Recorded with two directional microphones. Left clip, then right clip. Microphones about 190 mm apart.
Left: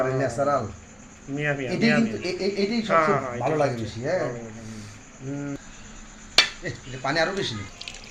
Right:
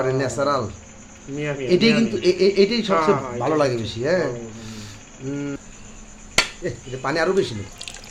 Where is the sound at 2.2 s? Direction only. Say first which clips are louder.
Right 9 dB; 45° right (ahead or behind).